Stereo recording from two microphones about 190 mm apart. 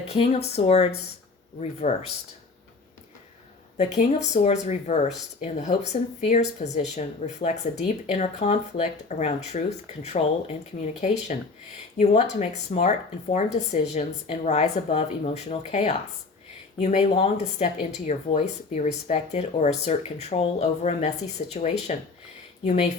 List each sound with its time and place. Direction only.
0.1 s speech: 30° left (ahead or behind)
3.8 s speech: 35° left (ahead or behind)